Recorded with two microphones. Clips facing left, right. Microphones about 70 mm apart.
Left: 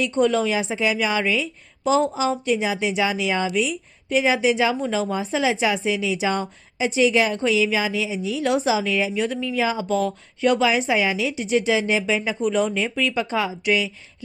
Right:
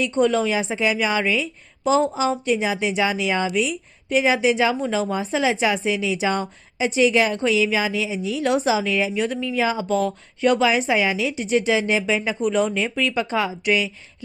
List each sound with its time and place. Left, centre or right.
0.0 s a woman's voice: right
0.6 s a woman's voice: right